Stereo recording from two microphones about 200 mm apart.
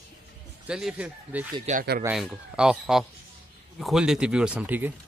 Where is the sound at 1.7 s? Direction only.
35° right (ahead or behind).